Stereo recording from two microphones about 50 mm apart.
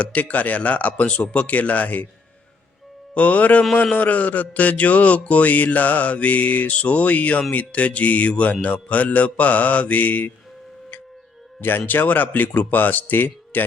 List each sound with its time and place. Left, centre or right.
0.0 s speech: left
3.2 s speech: left
3.9 s mantra: left
7.5 s speech: left
11.9 s mantra: left